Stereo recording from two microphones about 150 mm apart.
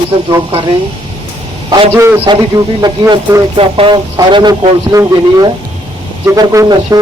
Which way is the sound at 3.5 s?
35° right (ahead or behind).